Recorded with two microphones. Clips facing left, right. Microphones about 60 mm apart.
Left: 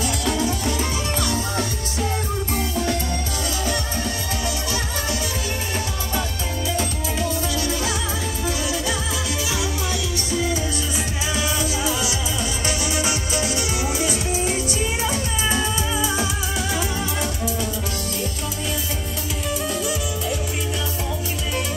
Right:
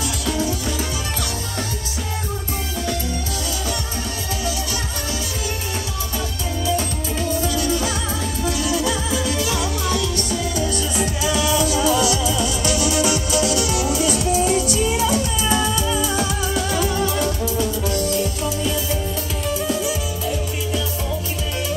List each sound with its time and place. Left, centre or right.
8.5 s music: centre
8.8 s music: centre
16.7 s music: centre
19.4 s music: centre